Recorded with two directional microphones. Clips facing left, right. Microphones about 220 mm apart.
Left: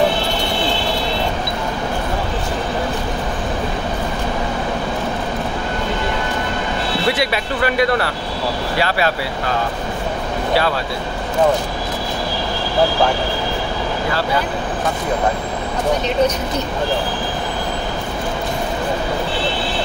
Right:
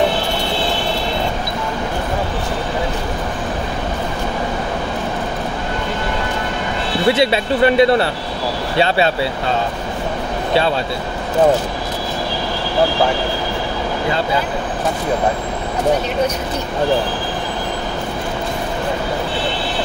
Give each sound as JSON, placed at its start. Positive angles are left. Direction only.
{"t": 7.1, "sound": "speech", "side_deg": -25}